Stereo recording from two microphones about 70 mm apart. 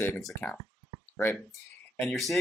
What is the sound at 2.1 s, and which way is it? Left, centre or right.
Speech, centre.